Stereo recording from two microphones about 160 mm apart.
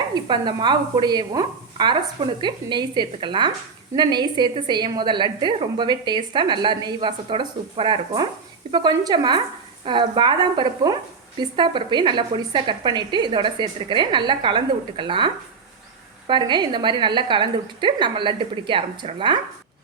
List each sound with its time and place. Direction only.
0.1 s a woman's voice: 30° right (ahead or behind)